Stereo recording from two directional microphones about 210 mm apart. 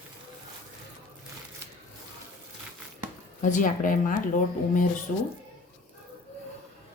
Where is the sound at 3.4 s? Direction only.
35° left (ahead or behind).